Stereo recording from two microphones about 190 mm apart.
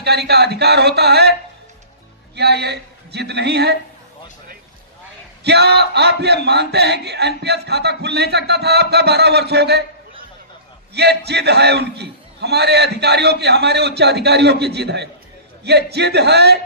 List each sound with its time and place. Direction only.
0.0 s a man's voice: 60° right (ahead or behind)
5.4 s speech: 60° right (ahead or behind)
10.9 s speech: 60° right (ahead or behind)